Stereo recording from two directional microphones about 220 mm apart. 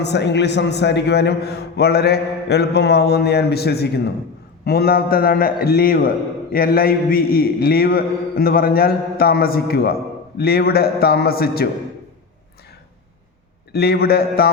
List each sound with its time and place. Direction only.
0.0 s a man's voice: 50° left (ahead or behind)
13.7 s a man's voice: 45° left (ahead or behind)